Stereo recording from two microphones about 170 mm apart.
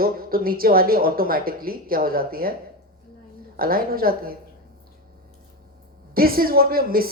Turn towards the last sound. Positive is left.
turn(degrees=-60)  # may be behind; listen again after turning